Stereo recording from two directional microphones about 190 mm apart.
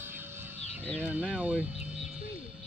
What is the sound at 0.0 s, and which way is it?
Music, 10° right (ahead or behind).